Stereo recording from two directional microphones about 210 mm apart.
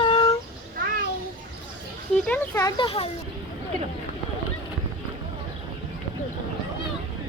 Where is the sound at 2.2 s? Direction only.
10° left (ahead or behind); by 3.1 s 25° left (ahead or behind).